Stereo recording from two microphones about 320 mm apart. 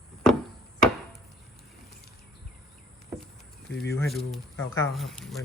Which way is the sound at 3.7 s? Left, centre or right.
Left.